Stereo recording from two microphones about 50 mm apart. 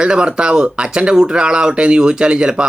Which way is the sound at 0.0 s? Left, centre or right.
Centre.